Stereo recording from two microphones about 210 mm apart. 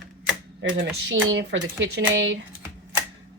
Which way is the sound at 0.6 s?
65° right (ahead or behind).